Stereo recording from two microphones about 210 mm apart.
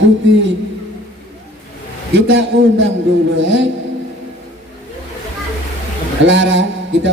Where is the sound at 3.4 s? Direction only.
60° right (ahead or behind).